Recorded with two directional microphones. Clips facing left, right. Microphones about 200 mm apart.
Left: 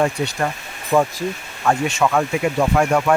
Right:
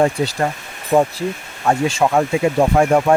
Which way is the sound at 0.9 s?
25° right (ahead or behind).